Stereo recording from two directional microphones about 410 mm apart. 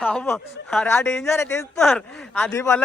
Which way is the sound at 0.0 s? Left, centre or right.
Centre.